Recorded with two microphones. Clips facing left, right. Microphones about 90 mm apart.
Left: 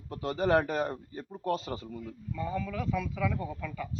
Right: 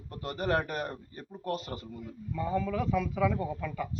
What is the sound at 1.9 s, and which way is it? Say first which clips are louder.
Speech: even; 20° right (ahead or behind).